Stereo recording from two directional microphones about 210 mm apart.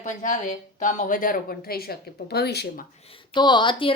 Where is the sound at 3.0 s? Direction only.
25° left (ahead or behind).